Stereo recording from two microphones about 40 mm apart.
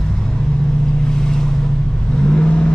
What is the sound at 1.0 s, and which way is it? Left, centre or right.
Vehicle, centre.